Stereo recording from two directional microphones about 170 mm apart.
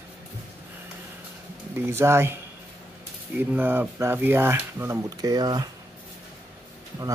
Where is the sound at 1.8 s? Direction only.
15° right (ahead or behind).